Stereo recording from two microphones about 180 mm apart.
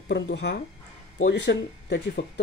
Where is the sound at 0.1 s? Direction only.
80° left.